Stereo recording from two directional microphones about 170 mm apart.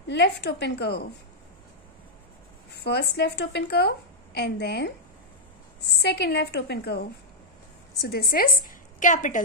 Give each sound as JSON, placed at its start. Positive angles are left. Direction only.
{"t": 0.1, "sound": "a woman's voice", "side_deg": 90}
{"t": 2.7, "sound": "a woman's voice", "side_deg": 80}